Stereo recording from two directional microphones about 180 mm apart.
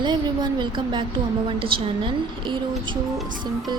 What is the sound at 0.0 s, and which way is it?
Speech, 25° right (ahead or behind).